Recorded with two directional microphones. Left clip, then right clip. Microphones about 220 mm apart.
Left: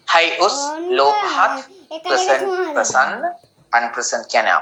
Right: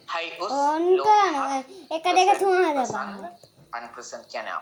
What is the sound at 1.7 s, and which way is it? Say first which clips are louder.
Speech: left 1 dB; 25° right (ahead or behind).